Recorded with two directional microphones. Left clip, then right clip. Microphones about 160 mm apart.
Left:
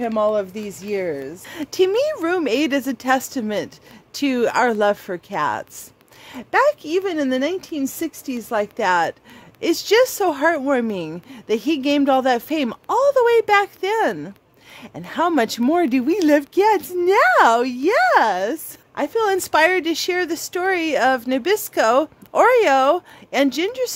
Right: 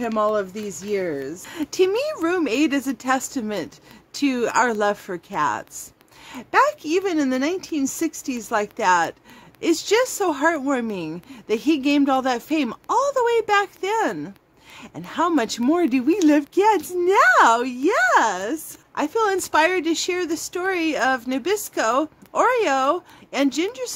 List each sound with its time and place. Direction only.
0.0 s speech: 25° left (ahead or behind)